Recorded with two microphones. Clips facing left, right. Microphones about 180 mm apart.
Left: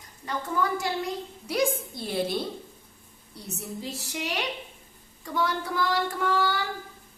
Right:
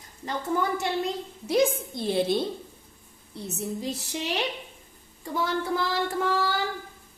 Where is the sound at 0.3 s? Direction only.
30° right (ahead or behind).